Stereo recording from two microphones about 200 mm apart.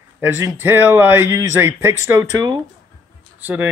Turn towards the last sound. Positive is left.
turn(degrees=-10)  # may be behind; listen again after turning